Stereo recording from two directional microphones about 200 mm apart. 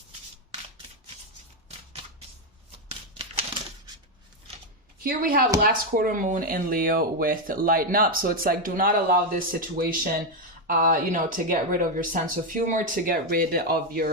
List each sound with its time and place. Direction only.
5.0 s speech: 45° right (ahead or behind)